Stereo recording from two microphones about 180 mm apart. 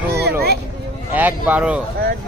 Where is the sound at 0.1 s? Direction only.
65° right (ahead or behind).